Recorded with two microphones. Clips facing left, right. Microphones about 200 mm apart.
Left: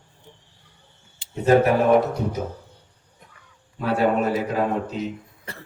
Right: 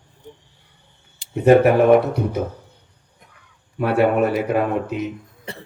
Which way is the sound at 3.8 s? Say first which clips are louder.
Right 4 dB; 65° right (ahead or behind).